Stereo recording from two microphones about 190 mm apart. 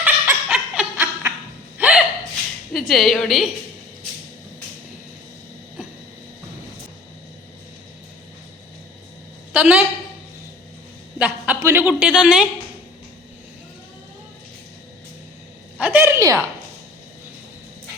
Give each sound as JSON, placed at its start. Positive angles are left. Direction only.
{"t": 0.0, "sound": "a sound", "side_deg": -5}
{"t": 1.8, "sound": "hiccup", "side_deg": -10}
{"t": 2.7, "sound": "a woman's voice", "side_deg": 0}
{"t": 9.5, "sound": "a woman's voice", "side_deg": -5}
{"t": 11.2, "sound": "a man's voice", "side_deg": -10}
{"t": 15.8, "sound": "a woman's voice", "side_deg": -10}